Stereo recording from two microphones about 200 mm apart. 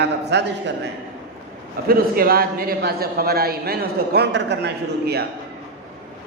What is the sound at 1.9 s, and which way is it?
A man's voice, 50° right (ahead or behind).